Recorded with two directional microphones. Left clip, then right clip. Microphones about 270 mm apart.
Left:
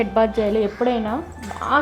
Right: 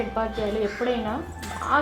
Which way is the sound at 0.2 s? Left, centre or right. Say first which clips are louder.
Left 10 dB; left.